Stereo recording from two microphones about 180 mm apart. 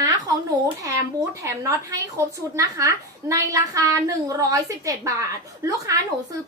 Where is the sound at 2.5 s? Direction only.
15° right (ahead or behind).